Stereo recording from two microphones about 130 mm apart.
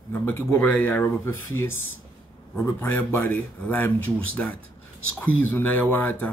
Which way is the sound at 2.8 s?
15° left (ahead or behind).